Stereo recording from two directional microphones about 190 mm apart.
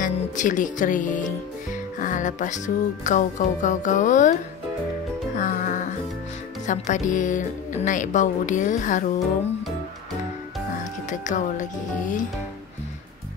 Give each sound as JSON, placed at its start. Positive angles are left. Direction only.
{"t": 0.0, "sound": "speech", "side_deg": 40}
{"t": 5.3, "sound": "music", "side_deg": 40}
{"t": 6.6, "sound": "speech", "side_deg": 40}
{"t": 10.8, "sound": "speech", "side_deg": 40}